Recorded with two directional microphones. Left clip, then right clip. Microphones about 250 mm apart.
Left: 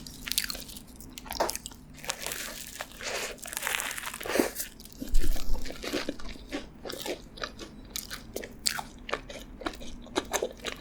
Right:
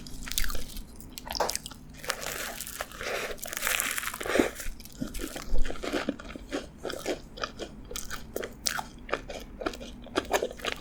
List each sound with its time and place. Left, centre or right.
0.3 s chewing: centre
1.3 s biting: centre
2.7 s crumpling: centre
8.4 s biting: centre